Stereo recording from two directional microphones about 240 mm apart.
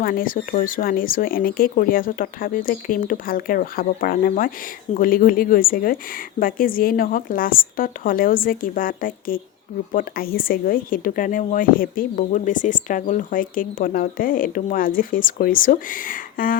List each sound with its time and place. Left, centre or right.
0.0 s speech: left